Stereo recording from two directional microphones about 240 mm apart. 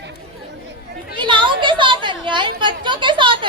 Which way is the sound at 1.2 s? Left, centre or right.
Centre.